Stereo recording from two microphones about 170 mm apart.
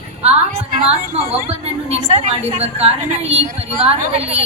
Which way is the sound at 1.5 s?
40° right (ahead or behind).